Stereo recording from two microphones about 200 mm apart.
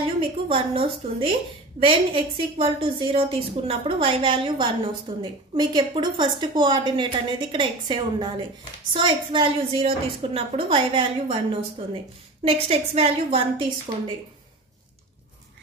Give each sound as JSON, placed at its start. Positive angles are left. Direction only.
{"t": 0.0, "sound": "a woman's voice", "side_deg": -25}
{"t": 12.4, "sound": "a woman's voice", "side_deg": -30}